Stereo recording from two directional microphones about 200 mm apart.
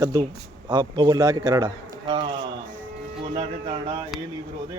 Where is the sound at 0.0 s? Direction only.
20° right (ahead or behind).